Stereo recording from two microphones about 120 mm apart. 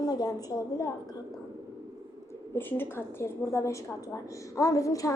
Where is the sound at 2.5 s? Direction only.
15° left (ahead or behind).